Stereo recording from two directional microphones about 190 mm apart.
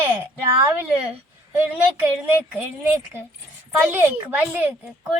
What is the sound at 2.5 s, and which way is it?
A woman's voice, 10° right (ahead or behind).